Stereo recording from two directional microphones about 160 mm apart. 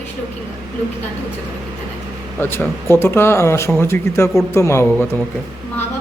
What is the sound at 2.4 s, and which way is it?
Speech, 10° left (ahead or behind).